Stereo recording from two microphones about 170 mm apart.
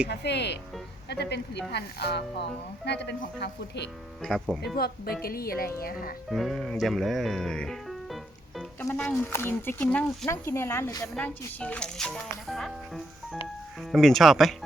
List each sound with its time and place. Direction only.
0.1 s speech: 80° left
4.2 s speech: centre (ahead or behind)
4.8 s a woman's voice: 65° left (ahead or behind)
6.3 s speech: centre (ahead or behind); by 11.0 s 20° left (ahead or behind)
11.0 s speech: 5° left (ahead or behind)